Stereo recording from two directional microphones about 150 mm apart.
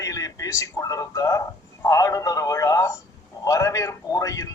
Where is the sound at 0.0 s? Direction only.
20° left (ahead or behind).